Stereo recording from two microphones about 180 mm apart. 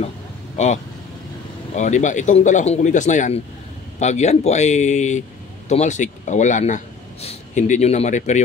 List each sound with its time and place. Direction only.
1.8 s speech: 40° left (ahead or behind)